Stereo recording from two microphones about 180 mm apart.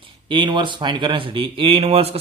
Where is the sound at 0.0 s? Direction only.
25° right (ahead or behind).